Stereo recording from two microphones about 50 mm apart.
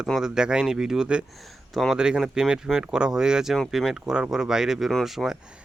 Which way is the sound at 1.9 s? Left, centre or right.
Centre.